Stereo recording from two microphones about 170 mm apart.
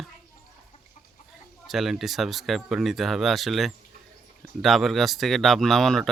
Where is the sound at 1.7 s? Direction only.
Centre (ahead or behind).